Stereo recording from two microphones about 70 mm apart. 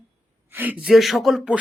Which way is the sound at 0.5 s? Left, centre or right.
Right.